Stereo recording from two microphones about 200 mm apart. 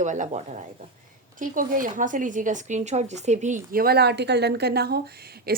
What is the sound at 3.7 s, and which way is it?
Speech, 50° right (ahead or behind).